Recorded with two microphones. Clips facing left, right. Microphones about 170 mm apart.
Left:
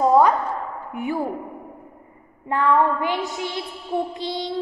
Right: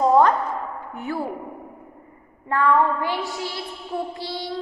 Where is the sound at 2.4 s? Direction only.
20° left (ahead or behind).